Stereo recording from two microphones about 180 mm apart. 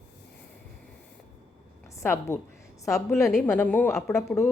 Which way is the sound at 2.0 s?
15° left (ahead or behind).